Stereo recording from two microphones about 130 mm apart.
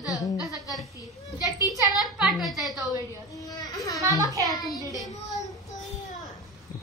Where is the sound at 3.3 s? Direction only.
30° left (ahead or behind).